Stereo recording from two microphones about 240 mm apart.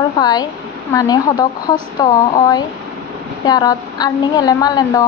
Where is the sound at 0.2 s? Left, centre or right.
Centre.